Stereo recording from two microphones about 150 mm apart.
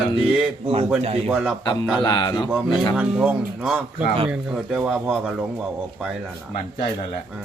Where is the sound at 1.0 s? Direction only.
40° right (ahead or behind).